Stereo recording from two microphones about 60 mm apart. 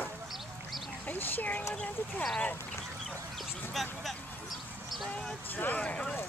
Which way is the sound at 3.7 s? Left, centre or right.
Centre.